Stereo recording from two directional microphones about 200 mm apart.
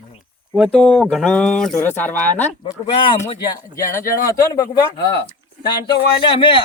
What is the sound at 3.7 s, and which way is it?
Speech, 15° left (ahead or behind).